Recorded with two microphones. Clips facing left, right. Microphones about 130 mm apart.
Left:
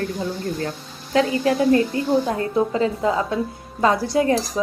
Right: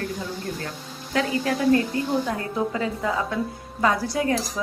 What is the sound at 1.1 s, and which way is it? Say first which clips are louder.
Speech: left 5 dB; 30° left (ahead or behind).